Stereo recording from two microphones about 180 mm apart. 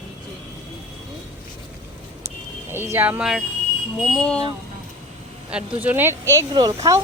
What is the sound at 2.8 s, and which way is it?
Speech, 10° right (ahead or behind).